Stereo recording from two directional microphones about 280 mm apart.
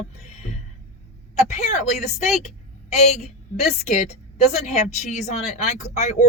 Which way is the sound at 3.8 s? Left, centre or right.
Left.